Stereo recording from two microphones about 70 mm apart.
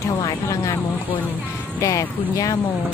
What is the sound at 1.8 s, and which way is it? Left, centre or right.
Speech, left.